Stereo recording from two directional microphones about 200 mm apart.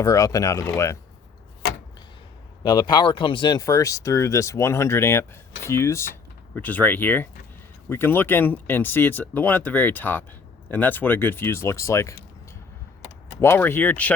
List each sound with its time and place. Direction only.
0.0 s speech: 15° left (ahead or behind)
2.6 s speech: 20° left (ahead or behind)
13.4 s speech: 10° left (ahead or behind)